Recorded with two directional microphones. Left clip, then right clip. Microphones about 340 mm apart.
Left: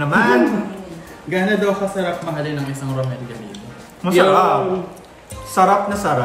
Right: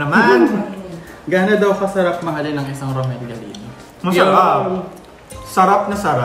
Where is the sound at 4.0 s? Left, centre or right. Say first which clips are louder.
Right 1 dB; centre.